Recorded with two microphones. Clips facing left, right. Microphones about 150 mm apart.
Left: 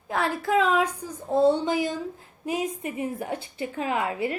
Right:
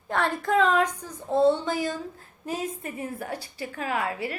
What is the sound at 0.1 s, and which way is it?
A woman's voice, 5° left (ahead or behind).